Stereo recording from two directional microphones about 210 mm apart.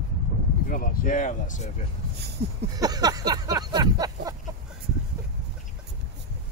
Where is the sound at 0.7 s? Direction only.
40° left (ahead or behind).